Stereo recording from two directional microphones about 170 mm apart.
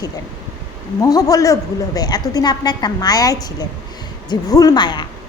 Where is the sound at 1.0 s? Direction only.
20° left (ahead or behind).